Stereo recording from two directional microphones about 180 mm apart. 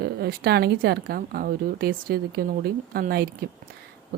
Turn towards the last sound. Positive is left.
turn(degrees=-55)  # may be behind; listen again after turning